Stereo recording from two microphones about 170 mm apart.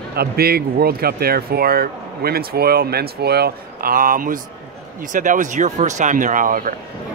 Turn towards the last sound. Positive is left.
turn(degrees=-50)  # may be behind; listen again after turning